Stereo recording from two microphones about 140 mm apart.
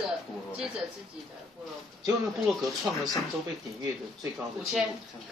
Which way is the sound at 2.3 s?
Centre (ahead or behind).